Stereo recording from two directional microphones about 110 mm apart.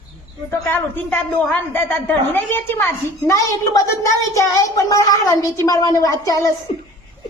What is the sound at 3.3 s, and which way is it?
A woman's voice, 30° left (ahead or behind).